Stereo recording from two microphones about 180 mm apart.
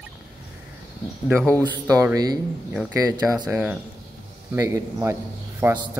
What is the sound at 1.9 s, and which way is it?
Speech, 20° right (ahead or behind).